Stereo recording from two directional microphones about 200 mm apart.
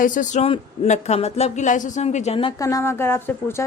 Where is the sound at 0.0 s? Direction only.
40° left (ahead or behind).